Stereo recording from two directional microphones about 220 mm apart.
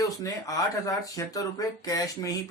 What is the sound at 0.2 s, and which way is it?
Speech, 15° left (ahead or behind).